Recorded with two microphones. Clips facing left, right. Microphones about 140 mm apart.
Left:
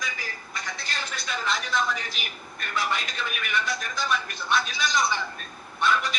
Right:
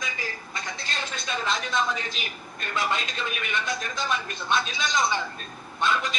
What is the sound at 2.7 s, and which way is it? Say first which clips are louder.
Speech: right 1 dB; 25° right (ahead or behind).